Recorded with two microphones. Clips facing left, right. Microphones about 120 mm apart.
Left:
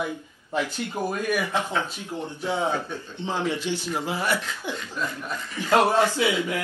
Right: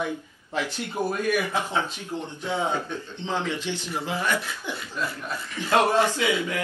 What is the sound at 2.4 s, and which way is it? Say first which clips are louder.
Speech: left 1 dB; 15° left (ahead or behind).